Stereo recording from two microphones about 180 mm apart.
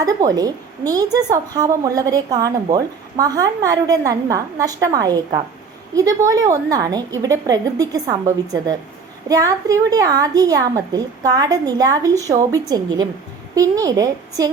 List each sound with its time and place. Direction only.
0.0 s a woman's voice: 20° right (ahead or behind)
9.3 s a woman's voice: 20° right (ahead or behind)